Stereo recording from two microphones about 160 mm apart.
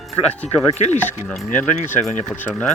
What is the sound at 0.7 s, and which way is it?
Speech, 45° left (ahead or behind).